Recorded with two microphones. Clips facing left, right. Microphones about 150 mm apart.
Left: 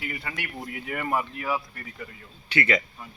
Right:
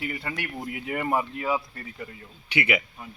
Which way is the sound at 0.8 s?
20° right (ahead or behind).